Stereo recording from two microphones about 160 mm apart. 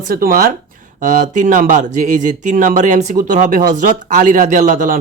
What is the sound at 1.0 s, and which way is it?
Speech, 50° right (ahead or behind).